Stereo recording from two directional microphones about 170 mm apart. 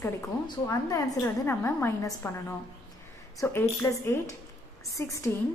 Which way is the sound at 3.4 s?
15° left (ahead or behind).